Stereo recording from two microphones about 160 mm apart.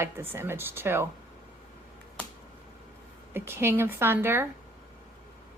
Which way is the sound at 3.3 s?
15° right (ahead or behind).